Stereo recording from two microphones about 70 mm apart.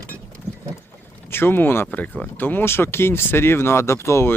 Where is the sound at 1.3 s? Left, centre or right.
Left.